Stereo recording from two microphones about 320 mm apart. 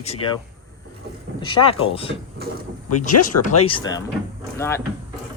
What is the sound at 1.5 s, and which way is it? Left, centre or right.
Speech, centre.